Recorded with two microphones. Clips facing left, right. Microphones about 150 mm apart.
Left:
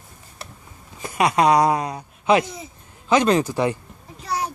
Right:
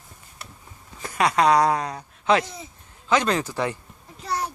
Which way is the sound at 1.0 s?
15° left (ahead or behind).